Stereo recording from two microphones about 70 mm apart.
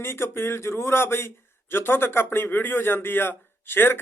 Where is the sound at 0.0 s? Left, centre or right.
Left.